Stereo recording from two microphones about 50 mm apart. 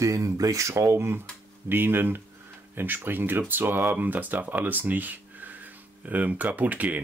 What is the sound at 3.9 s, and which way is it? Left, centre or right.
Speech, right.